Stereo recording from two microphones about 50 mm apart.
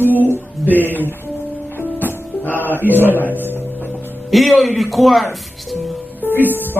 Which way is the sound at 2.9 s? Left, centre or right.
Left.